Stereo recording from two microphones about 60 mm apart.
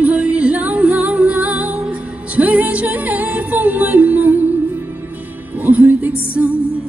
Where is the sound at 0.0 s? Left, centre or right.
Right.